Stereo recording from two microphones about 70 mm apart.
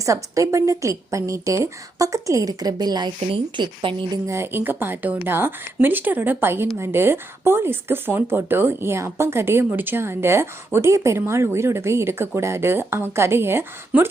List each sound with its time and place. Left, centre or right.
0.0 s a woman's voice: right
2.5 s a woman's voice: right
4.3 s speech: right
13.9 s speech: centre